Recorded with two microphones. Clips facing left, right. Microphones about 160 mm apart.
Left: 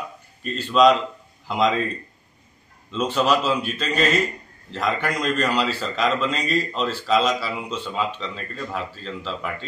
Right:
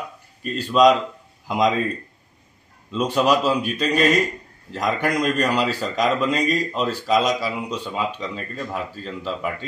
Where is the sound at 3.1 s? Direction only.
10° right (ahead or behind).